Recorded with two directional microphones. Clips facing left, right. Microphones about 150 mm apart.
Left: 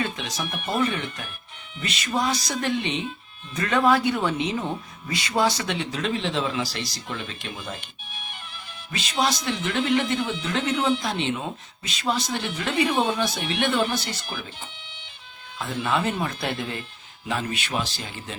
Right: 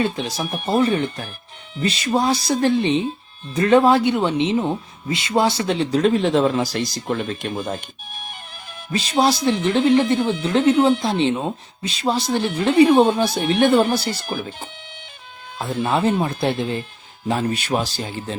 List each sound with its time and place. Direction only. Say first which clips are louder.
0.0 s speech: right 6 dB; 30° right (ahead or behind)
10.8 s speech: right 7 dB; 45° right (ahead or behind)
11.0 s speech: right 7 dB; 30° right (ahead or behind)